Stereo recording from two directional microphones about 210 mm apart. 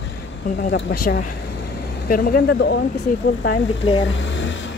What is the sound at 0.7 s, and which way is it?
Speech, 50° left (ahead or behind).